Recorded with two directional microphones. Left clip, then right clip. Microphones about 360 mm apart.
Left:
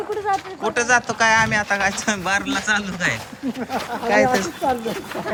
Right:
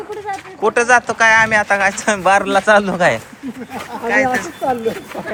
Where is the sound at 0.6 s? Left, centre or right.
Centre.